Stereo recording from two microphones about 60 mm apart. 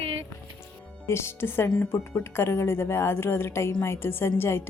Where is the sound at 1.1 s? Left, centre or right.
Left.